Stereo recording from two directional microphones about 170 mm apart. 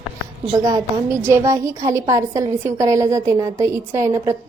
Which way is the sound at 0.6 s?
20° right (ahead or behind).